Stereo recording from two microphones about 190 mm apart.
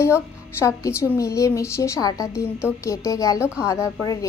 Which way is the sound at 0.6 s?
15° left (ahead or behind).